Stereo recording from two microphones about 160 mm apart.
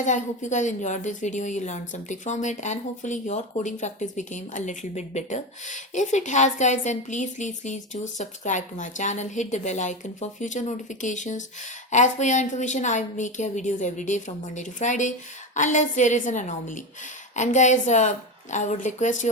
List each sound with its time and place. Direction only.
0.0 s a woman's voice: 50° left (ahead or behind)